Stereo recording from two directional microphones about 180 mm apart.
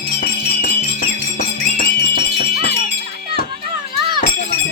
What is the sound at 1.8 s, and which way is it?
Music, 60° left (ahead or behind).